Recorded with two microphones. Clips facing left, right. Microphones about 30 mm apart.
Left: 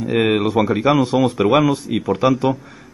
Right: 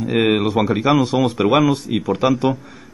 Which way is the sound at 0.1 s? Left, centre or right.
Centre.